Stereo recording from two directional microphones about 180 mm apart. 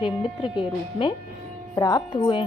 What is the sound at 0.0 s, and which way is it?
A woman's voice, 30° left (ahead or behind).